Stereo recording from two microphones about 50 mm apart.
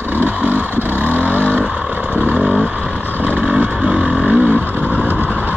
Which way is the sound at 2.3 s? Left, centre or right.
Centre.